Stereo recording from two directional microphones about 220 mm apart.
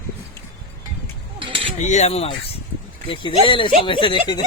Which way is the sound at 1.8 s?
30° left (ahead or behind).